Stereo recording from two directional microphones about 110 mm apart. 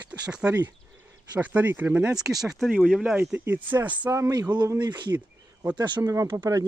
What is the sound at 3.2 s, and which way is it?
Speech, 15° right (ahead or behind).